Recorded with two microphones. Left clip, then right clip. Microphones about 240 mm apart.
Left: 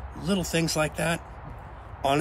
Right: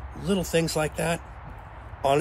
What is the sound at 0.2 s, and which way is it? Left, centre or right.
Speech, centre.